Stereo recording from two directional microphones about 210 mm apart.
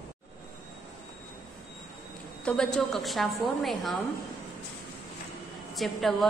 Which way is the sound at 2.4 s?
5° left (ahead or behind).